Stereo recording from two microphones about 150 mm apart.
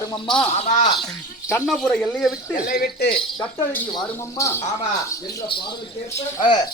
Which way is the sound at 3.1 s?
10° left (ahead or behind).